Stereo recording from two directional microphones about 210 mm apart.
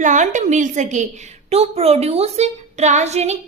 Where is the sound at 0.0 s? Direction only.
35° right (ahead or behind).